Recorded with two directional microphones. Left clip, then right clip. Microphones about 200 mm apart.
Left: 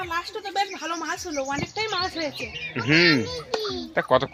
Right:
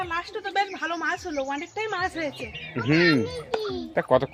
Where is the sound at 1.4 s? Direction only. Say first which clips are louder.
Left 2 dB; 5° right (ahead or behind).